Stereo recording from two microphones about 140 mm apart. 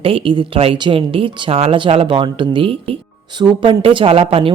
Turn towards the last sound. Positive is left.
turn(degrees=-40)  # may be behind; listen again after turning